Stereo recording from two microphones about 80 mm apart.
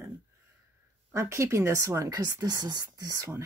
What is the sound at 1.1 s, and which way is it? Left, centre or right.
Speech, right.